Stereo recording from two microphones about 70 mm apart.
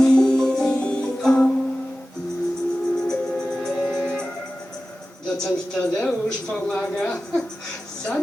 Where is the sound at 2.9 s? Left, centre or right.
Centre.